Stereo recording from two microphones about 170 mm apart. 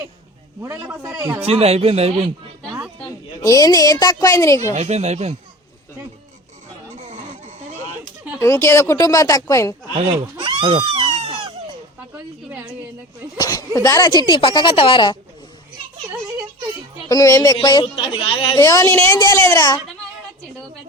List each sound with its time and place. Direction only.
0.6 s a man's voice: 15° right (ahead or behind)
1.4 s speech: 35° right (ahead or behind)
3.1 s a woman's voice: 20° left (ahead or behind)
4.7 s speech: 40° right (ahead or behind)
8.4 s speech: 15° left (ahead or behind)
10.4 s a sound: 30° right (ahead or behind)
12.1 s a woman's voice: 10° right (ahead or behind)
13.3 s speech: 20° left (ahead or behind)
17.1 s speech: 20° left (ahead or behind)
18.5 s speech: 20° left (ahead or behind)